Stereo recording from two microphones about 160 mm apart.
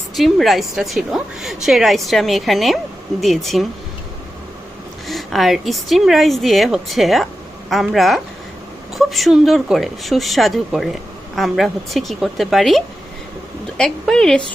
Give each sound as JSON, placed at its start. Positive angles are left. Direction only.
{"t": 0.2, "sound": "a woman's voice", "side_deg": 0}
{"t": 5.0, "sound": "a woman's voice", "side_deg": 0}